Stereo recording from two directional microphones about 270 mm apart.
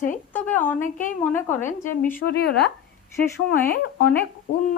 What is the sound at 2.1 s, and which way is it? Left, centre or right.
Speech, left.